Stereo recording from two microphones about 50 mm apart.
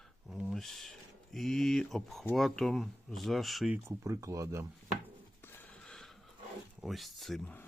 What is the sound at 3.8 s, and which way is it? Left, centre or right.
Speech, right.